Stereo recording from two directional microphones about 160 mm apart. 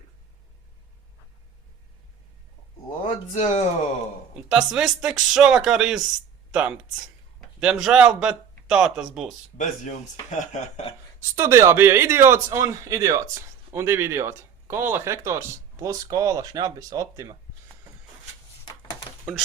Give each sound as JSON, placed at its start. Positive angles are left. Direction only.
{"t": 3.3, "sound": "speech", "side_deg": 45}
{"t": 4.4, "sound": "a man's voice", "side_deg": -5}
{"t": 9.6, "sound": "speech", "side_deg": 50}
{"t": 11.2, "sound": "a man's voice", "side_deg": -15}
{"t": 18.6, "sound": "a sound", "side_deg": 25}